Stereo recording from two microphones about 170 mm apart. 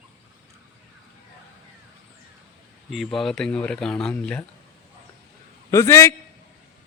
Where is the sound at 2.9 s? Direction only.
Centre (ahead or behind).